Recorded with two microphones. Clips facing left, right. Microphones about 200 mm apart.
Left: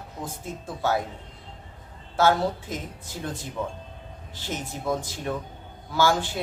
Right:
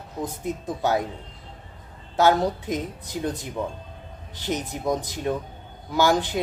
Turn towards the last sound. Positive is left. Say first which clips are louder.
# right 2 dB
turn(degrees=-20)  # may be behind; listen again after turning